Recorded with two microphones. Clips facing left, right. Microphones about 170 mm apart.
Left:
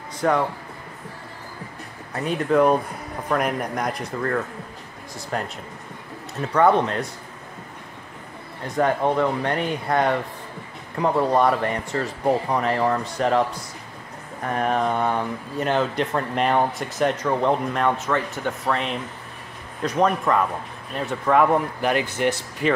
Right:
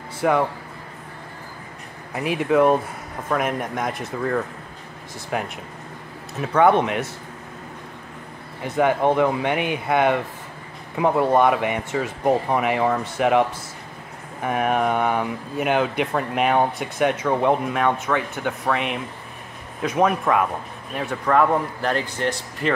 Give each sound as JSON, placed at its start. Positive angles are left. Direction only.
{"t": 0.2, "sound": "speech", "side_deg": -10}
{"t": 2.1, "sound": "speech", "side_deg": -5}
{"t": 6.7, "sound": "speech", "side_deg": -15}
{"t": 8.6, "sound": "speech", "side_deg": -5}